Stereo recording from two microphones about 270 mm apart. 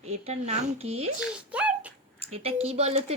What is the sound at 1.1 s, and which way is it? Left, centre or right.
Speech, centre.